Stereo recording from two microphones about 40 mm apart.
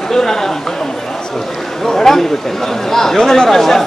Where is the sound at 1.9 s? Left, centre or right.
Centre.